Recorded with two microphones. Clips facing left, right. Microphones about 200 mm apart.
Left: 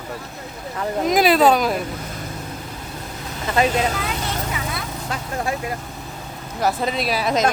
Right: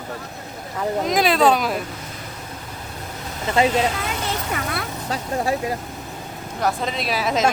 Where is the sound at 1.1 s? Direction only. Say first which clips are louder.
Left 3 dB; 5° left (ahead or behind).